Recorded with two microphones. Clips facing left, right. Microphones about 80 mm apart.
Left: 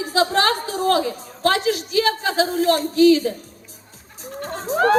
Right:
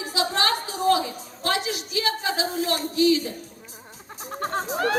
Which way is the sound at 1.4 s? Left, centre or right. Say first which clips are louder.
Left 7 dB; left.